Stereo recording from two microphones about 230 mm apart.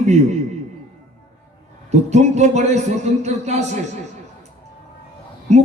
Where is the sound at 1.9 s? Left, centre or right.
Right.